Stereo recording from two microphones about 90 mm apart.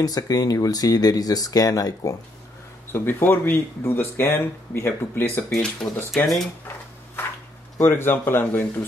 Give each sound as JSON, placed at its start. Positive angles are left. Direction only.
{"t": 0.0, "sound": "speech", "side_deg": 45}
{"t": 2.9, "sound": "speech", "side_deg": 25}
{"t": 5.5, "sound": "speech", "side_deg": 10}
{"t": 7.8, "sound": "speech", "side_deg": 25}